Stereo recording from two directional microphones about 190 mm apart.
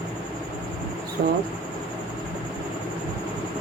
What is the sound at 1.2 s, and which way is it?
Speech, 65° right (ahead or behind).